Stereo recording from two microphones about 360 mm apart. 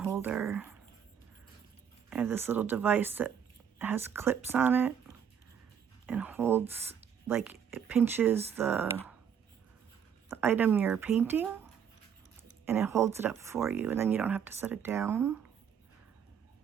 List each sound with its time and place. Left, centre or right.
0.0 s speech: centre
2.0 s speech: centre
6.1 s speech: centre
10.2 s speech: centre
12.6 s speech: centre